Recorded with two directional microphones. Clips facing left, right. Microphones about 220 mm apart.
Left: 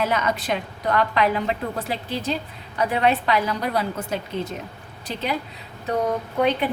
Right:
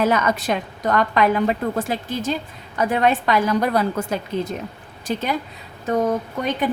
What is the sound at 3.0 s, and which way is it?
Speech, 50° right (ahead or behind).